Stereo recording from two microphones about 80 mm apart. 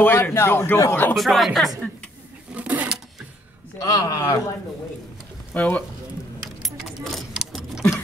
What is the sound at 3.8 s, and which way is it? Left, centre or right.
Speech, left.